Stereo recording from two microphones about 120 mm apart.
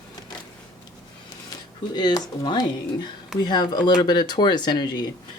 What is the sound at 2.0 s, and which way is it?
Speech, 40° left (ahead or behind).